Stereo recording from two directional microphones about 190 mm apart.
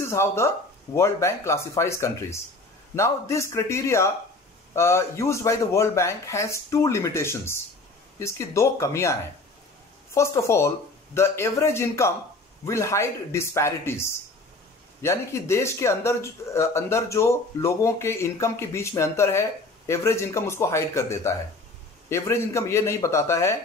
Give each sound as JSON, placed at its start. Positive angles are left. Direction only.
{"t": 0.1, "sound": "speech", "side_deg": 15}